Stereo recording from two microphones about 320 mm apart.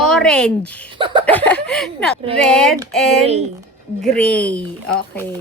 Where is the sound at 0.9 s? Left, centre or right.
Centre.